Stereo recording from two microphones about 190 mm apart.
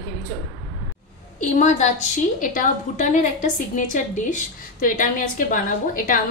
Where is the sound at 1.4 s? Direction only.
40° left (ahead or behind).